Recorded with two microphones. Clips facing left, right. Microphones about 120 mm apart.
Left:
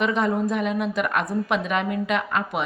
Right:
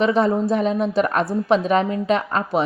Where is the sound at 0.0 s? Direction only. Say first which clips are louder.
Right 4 dB; 30° right (ahead or behind).